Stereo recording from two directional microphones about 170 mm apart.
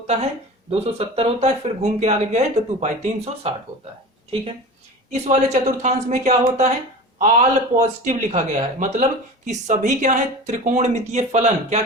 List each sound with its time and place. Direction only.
0.7 s speech: 35° right (ahead or behind)
5.1 s speech: 40° right (ahead or behind)